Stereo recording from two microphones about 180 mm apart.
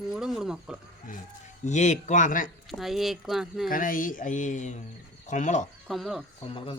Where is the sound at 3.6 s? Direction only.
50° left (ahead or behind).